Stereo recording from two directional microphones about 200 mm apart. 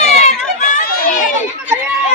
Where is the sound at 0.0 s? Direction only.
35° left (ahead or behind).